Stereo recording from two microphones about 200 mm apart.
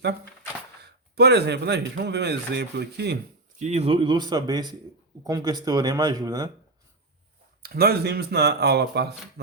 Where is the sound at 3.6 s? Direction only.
30° right (ahead or behind).